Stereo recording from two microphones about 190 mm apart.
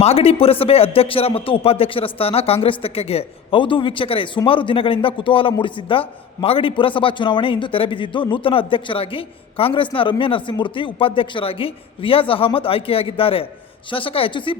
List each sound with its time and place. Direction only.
0.0 s a man's voice: 30° left (ahead or behind)